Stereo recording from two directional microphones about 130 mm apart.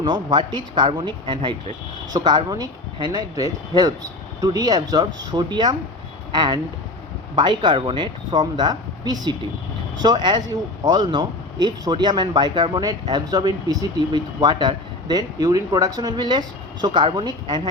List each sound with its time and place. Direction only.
0.0 s speech: 35° right (ahead or behind)